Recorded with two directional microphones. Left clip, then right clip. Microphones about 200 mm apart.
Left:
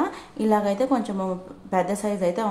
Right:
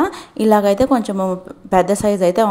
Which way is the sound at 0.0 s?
40° right (ahead or behind).